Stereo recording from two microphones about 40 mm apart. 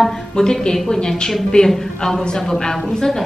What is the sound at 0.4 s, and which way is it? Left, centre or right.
Speech, centre.